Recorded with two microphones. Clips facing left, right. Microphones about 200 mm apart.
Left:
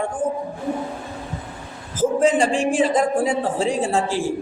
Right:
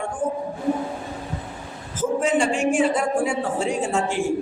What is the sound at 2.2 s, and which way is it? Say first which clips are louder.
Speech: left 2 dB; 35° left (ahead or behind).